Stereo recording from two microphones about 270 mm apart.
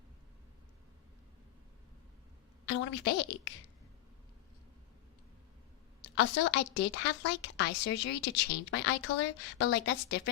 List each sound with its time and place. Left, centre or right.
2.6 s a woman's voice: left
6.0 s a woman's voice: left